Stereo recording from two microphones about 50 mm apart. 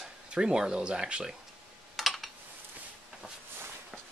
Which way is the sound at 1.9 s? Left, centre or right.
Centre.